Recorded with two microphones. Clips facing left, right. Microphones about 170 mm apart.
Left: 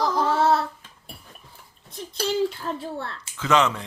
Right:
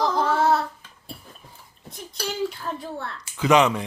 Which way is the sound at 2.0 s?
30° left (ahead or behind).